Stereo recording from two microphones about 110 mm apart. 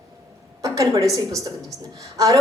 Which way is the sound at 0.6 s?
30° right (ahead or behind).